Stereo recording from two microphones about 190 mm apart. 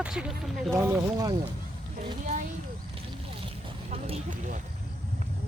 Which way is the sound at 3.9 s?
30° right (ahead or behind).